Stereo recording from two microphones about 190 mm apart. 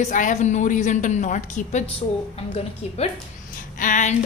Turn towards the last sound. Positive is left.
turn(degrees=45)  # may be behind; listen again after turning